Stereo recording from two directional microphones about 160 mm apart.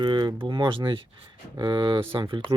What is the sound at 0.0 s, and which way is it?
Speech, 30° right (ahead or behind).